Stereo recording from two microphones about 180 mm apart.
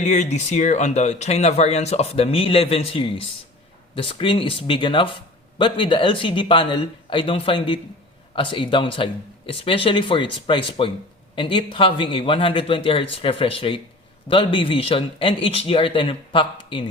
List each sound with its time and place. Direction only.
0.0 s speech: 40° left (ahead or behind)